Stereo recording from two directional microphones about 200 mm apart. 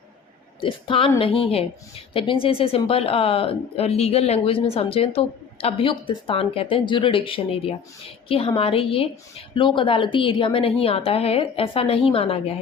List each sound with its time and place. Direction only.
0.6 s speech: 25° left (ahead or behind)